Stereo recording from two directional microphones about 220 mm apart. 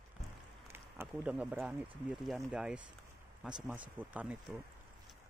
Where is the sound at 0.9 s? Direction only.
10° right (ahead or behind).